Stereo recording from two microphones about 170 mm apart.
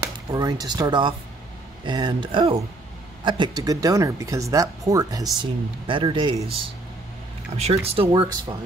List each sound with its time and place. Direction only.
0.3 s speech: 20° right (ahead or behind)